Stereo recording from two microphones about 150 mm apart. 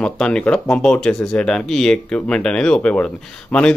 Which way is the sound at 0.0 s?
5° left (ahead or behind).